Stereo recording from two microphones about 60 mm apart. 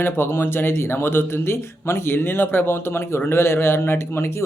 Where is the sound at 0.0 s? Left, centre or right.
Left.